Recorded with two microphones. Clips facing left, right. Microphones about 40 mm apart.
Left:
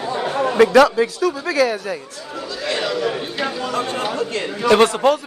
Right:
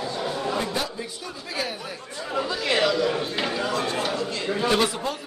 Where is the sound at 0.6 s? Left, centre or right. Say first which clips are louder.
Left 17 dB; left.